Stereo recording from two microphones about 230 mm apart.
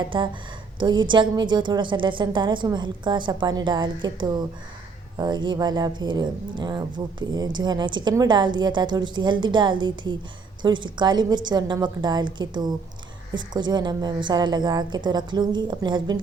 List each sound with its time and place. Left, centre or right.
0.0 s speech: centre